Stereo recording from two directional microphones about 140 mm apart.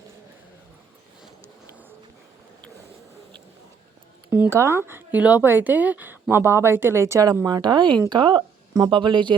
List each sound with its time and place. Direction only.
4.3 s speech: 20° right (ahead or behind); by 9.3 s 35° right (ahead or behind)